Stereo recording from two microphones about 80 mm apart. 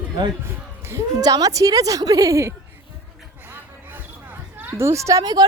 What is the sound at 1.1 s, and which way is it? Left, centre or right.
A woman's voice, right.